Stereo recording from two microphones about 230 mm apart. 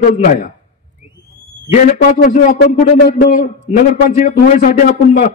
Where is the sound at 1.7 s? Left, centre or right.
Left.